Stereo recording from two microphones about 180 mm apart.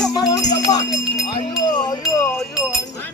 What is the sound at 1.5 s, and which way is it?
Speech, 25° left (ahead or behind).